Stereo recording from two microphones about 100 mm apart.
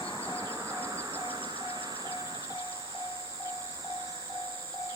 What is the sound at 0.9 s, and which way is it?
Music, 40° right (ahead or behind).